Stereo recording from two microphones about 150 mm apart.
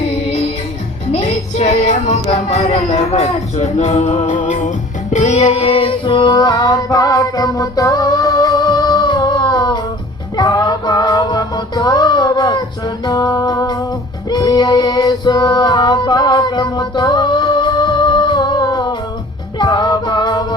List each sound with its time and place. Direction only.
1.1 s music: 50° left (ahead or behind)
5.1 s child singing: 50° left (ahead or behind); by 9.8 s 30° left (ahead or behind)
10.3 s music: 30° left (ahead or behind)